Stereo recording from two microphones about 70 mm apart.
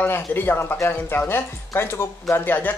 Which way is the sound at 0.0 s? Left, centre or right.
Left.